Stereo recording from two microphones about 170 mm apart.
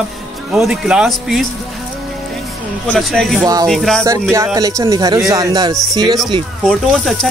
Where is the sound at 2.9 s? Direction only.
5° left (ahead or behind).